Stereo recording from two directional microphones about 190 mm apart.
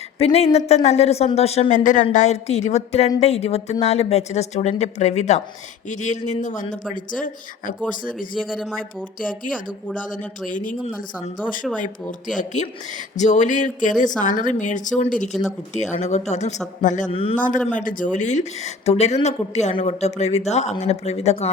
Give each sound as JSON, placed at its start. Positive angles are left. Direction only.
{"t": 0.2, "sound": "speech", "side_deg": 30}
{"t": 8.4, "sound": "speech", "side_deg": 0}
{"t": 9.4, "sound": "speech", "side_deg": 45}
{"t": 13.1, "sound": "speech", "side_deg": 40}
{"t": 15.3, "sound": "speech", "side_deg": 0}
{"t": 15.7, "sound": "speech", "side_deg": 40}
{"t": 17.7, "sound": "speech", "side_deg": 45}